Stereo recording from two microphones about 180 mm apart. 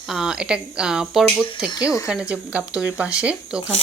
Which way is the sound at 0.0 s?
Centre (ahead or behind).